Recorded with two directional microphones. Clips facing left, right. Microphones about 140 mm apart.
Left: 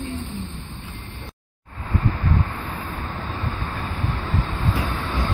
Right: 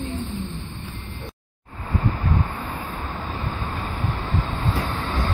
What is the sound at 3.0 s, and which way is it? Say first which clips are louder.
Vehicle: even; centre (ahead or behind).